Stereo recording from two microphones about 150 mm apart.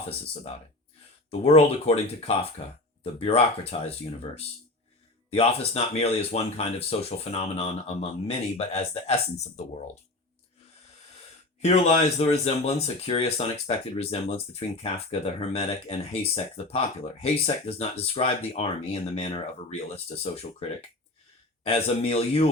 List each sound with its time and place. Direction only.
1.3 s speech: 45° left (ahead or behind)
11.6 s speech: 45° left (ahead or behind)